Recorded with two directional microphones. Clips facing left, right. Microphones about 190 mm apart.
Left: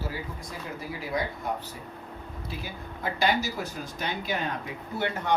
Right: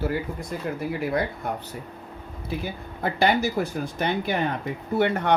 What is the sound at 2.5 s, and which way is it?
Speech, 55° right (ahead or behind).